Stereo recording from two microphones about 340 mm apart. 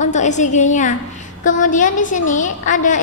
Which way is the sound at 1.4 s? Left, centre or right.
Left.